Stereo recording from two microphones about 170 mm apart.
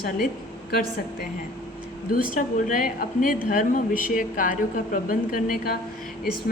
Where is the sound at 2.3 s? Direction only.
50° left (ahead or behind).